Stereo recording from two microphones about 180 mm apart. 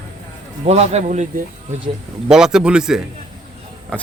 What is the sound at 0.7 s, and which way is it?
Speech, 40° right (ahead or behind).